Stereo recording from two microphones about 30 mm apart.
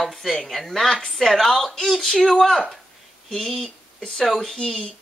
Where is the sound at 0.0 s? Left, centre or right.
Centre.